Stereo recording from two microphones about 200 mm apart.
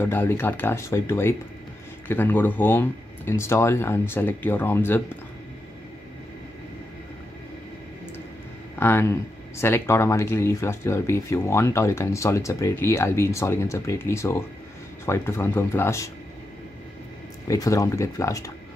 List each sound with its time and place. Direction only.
0.0 s speech: 10° left (ahead or behind)
8.7 s speech: 10° left (ahead or behind)
17.5 s speech: 15° left (ahead or behind)